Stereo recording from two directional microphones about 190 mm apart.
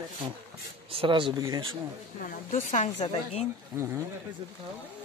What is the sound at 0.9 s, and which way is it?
Speech, 25° right (ahead or behind).